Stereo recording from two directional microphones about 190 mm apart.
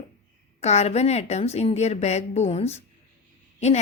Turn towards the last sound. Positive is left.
turn(degrees=35)  # may be behind; listen again after turning